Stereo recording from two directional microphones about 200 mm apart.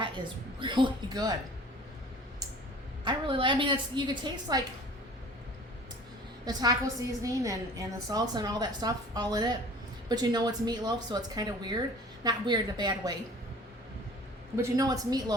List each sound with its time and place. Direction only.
0.6 s a woman's voice: 25° right (ahead or behind)
3.0 s a woman's voice: 25° right (ahead or behind)
6.4 s a woman's voice: 20° right (ahead or behind)
14.5 s a woman's voice: 15° right (ahead or behind)